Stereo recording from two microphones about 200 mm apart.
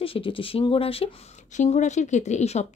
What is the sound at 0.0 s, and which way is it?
Speech, 25° left (ahead or behind).